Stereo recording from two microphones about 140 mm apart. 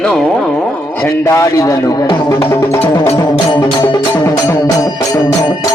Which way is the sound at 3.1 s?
25° left (ahead or behind).